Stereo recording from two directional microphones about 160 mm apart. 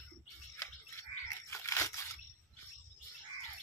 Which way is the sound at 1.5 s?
15° left (ahead or behind).